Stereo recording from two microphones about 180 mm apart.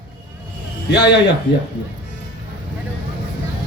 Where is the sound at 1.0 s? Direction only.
70° left (ahead or behind).